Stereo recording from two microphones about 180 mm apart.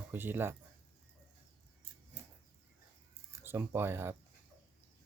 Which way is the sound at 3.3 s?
15° right (ahead or behind).